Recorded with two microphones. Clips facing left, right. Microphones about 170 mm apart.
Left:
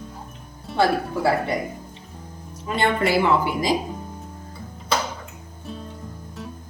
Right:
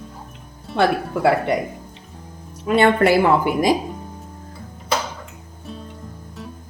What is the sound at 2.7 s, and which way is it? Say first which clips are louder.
A woman's voice: right 6 dB; 60° right (ahead or behind).